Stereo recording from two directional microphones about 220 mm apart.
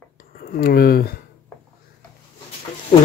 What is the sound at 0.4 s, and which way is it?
Speech, 40° left (ahead or behind).